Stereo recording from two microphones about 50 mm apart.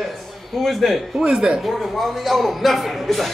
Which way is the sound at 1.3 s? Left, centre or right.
Centre.